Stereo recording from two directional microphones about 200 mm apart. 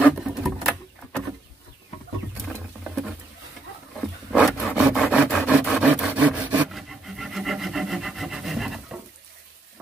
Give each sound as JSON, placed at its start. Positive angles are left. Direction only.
{"t": 0.0, "sound": "a sound", "side_deg": 0}
{"t": 2.4, "sound": "patter", "side_deg": 0}
{"t": 4.3, "sound": "wood", "side_deg": 0}